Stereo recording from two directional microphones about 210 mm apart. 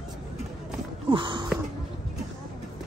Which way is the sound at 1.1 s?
25° right (ahead or behind).